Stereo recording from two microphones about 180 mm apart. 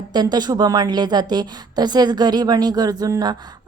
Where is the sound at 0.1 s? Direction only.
25° right (ahead or behind).